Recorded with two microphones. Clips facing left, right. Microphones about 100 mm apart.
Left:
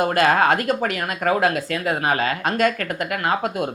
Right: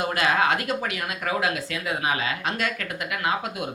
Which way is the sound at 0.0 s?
45° left (ahead or behind).